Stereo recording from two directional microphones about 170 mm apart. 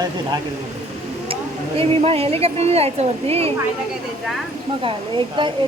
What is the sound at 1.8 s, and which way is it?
Speech, 35° right (ahead or behind).